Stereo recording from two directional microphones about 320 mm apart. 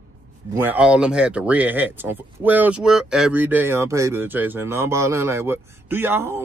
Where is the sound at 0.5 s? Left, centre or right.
Centre.